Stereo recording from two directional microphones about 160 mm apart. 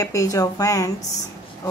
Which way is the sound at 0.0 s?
20° left (ahead or behind).